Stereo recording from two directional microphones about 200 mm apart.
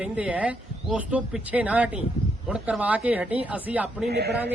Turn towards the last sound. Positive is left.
turn(degrees=-55)  # may be behind; listen again after turning